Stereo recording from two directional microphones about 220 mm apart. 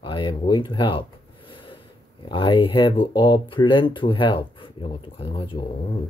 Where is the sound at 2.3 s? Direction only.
25° left (ahead or behind).